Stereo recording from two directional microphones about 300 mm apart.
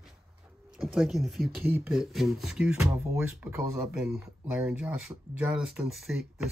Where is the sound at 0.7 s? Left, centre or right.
Centre.